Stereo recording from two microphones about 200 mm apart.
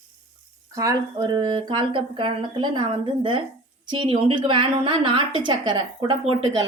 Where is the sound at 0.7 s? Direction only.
20° right (ahead or behind).